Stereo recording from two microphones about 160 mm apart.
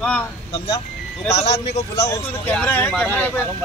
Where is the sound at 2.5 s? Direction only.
10° left (ahead or behind).